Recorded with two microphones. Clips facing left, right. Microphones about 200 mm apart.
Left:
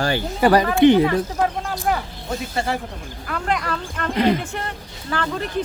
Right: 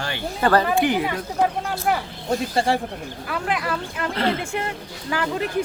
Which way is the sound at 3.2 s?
5° right (ahead or behind).